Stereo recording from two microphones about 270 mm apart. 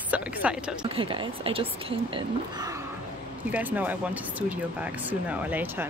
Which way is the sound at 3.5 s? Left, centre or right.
Centre.